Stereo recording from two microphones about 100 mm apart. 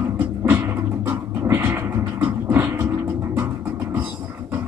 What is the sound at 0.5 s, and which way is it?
Music, 30° right (ahead or behind).